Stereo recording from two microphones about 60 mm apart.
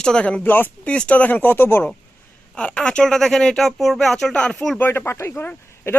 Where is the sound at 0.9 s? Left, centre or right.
Centre; by 1.8 s left.